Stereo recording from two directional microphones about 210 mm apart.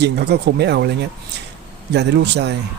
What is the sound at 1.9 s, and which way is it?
Speech, 55° right (ahead or behind).